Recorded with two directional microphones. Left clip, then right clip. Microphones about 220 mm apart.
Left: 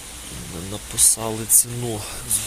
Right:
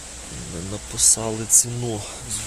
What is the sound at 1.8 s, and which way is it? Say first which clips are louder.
Speech: even; 15° right (ahead or behind).